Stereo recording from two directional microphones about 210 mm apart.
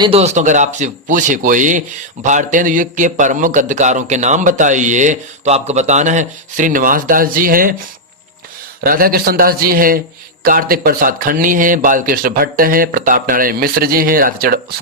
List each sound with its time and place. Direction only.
0.0 s a man's voice: 30° right (ahead or behind)
8.8 s speech: 45° right (ahead or behind)